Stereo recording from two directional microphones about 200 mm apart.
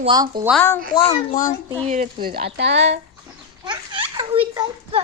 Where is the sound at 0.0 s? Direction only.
20° right (ahead or behind).